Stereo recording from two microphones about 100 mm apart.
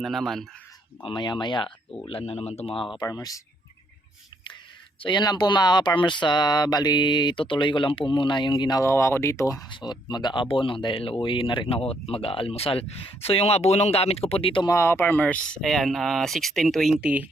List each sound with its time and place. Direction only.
0.0 s speech: centre (ahead or behind)
1.0 s speech: 50° left (ahead or behind)
2.0 s speech: 80° left
3.1 s speech: 35° left (ahead or behind)
5.0 s speech: 45° left (ahead or behind)
8.8 s speech: 25° left (ahead or behind)
9.6 s speech: 50° left (ahead or behind)
11.7 s speech: 80° left; by 14.7 s 60° left (ahead or behind)
14.7 s speech: 25° left (ahead or behind); by 17.0 s centre (ahead or behind)
17.0 s speech: 10° right (ahead or behind)